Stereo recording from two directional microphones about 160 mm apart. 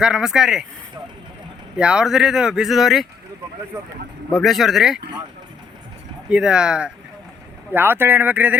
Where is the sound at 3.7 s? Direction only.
20° right (ahead or behind).